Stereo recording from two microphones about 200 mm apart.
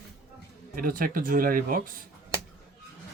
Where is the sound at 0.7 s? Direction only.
45° right (ahead or behind).